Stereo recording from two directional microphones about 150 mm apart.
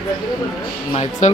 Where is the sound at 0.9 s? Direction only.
45° left (ahead or behind).